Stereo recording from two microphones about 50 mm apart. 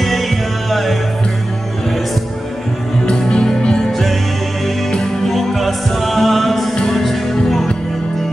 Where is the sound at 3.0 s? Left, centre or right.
Centre.